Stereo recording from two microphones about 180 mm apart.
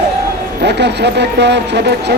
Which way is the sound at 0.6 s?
70° right (ahead or behind).